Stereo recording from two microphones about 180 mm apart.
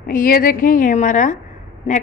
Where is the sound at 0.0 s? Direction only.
50° left (ahead or behind).